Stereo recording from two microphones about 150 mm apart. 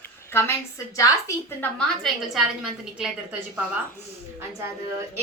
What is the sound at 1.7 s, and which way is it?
A woman's voice, 5° left (ahead or behind).